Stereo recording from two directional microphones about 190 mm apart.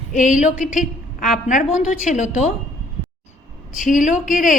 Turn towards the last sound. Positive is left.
turn(degrees=45)  # may be behind; listen again after turning